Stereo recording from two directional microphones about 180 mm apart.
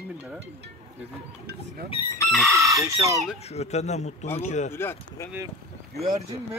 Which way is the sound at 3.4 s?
35° left (ahead or behind).